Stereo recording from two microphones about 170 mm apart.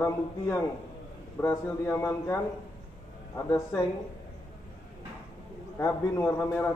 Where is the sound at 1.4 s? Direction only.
15° left (ahead or behind).